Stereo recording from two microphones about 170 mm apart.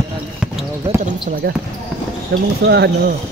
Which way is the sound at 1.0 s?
60° right (ahead or behind).